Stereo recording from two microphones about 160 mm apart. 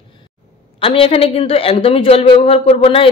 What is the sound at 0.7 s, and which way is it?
A woman's voice, 35° left (ahead or behind).